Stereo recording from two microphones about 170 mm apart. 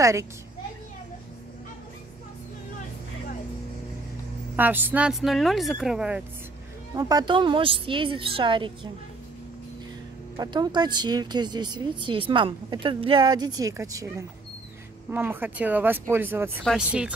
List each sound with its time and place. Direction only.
0.0 s speech: 15° right (ahead or behind)
4.6 s speech: 10° right (ahead or behind)
7.0 s a woman's voice: 25° right (ahead or behind)
10.3 s a woman's voice: 25° right (ahead or behind); by 17.1 s 5° right (ahead or behind)